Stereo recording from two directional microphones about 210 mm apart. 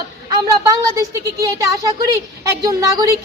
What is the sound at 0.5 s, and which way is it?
Speech, 15° right (ahead or behind).